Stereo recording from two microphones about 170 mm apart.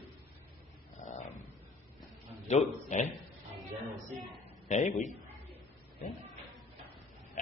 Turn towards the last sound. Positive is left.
turn(degrees=50)  # may be behind; listen again after turning